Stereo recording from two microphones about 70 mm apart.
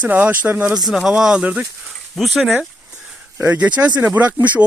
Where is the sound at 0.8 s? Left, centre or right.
Centre.